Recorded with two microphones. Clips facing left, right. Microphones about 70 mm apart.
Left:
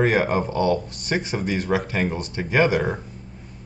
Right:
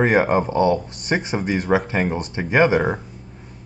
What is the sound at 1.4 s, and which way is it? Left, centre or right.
Speech, right.